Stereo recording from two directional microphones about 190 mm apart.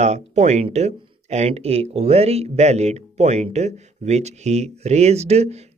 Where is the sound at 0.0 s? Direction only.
35° right (ahead or behind).